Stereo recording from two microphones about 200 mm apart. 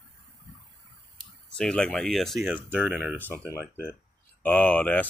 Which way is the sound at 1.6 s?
5° left (ahead or behind).